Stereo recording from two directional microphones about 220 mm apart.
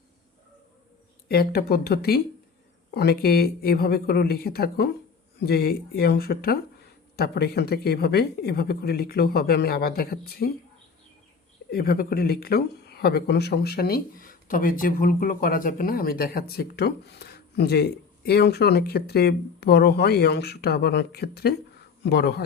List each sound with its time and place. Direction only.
1.3 s speech: 45° left (ahead or behind)
11.7 s speech: 45° left (ahead or behind)